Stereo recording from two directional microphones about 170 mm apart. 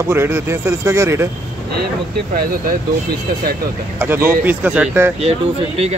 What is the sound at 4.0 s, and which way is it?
A man's voice, 15° right (ahead or behind).